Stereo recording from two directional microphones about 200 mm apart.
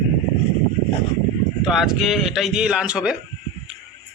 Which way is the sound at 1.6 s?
5° right (ahead or behind).